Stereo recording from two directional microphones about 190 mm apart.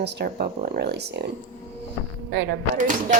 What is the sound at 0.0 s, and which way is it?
Speech, 60° right (ahead or behind).